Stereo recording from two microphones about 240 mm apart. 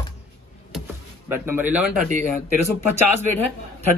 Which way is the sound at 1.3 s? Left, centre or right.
Centre.